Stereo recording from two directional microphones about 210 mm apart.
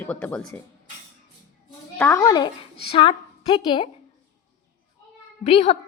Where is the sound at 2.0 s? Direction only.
15° left (ahead or behind).